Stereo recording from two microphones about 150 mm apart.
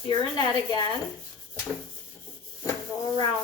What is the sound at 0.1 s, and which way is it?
Speech, 25° left (ahead or behind).